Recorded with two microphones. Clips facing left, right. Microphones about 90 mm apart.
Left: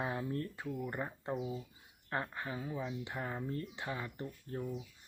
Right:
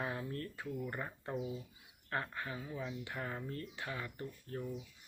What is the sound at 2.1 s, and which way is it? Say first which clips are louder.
Speech: left 1 dB; 25° left (ahead or behind).